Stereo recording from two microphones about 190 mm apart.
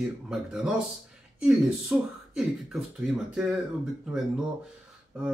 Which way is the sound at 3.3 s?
5° right (ahead or behind).